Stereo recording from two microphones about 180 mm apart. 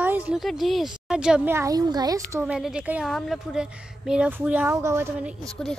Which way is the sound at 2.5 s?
5° right (ahead or behind).